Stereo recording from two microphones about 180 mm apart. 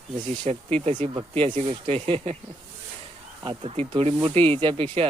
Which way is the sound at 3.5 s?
30° right (ahead or behind).